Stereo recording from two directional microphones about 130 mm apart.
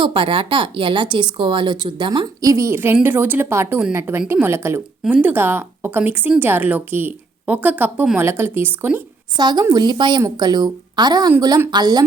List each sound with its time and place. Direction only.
0.0 s speech: 40° right (ahead or behind); by 9.0 s 15° right (ahead or behind)
9.4 s speech: 35° right (ahead or behind)